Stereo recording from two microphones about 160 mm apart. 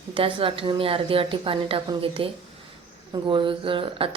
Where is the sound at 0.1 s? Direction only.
35° right (ahead or behind).